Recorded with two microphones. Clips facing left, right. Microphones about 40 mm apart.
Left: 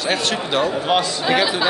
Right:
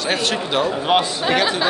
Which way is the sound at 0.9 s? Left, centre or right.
Right.